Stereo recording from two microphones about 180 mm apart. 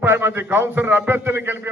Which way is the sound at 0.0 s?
15° right (ahead or behind).